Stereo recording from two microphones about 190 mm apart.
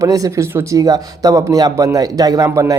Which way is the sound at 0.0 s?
15° right (ahead or behind).